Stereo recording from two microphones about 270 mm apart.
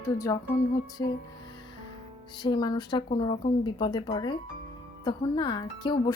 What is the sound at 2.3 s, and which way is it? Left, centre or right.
Speech, centre.